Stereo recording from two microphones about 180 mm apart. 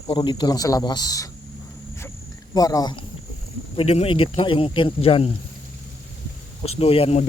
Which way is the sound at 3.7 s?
35° left (ahead or behind).